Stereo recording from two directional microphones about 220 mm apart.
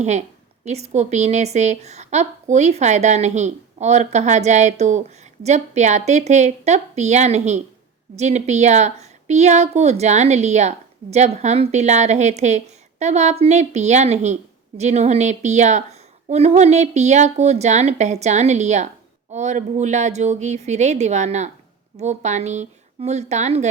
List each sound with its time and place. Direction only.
0.0 s a woman's voice: 30° right (ahead or behind)